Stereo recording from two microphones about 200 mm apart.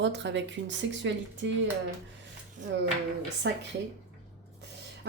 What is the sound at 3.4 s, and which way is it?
Speech, 60° right (ahead or behind).